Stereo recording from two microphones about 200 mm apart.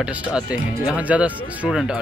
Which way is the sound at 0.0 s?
5° right (ahead or behind).